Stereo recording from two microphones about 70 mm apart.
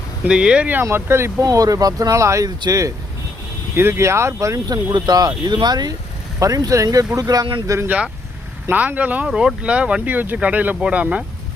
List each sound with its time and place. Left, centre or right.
0.3 s speech: centre
0.9 s speech: right
1.4 s speech: right
3.8 s speech: right
6.4 s speech: right
7.9 s speech: centre
9.2 s speech: centre